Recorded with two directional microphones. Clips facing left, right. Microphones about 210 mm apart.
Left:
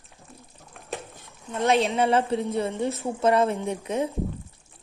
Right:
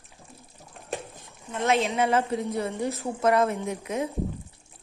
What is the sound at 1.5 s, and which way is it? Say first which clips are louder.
A woman's voice: left 2 dB; 30° left (ahead or behind).